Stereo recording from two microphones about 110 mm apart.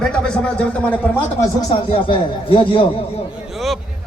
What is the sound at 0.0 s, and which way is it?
Speech, 10° left (ahead or behind).